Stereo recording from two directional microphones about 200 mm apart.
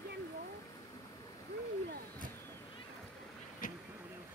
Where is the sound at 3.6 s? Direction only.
45° left (ahead or behind).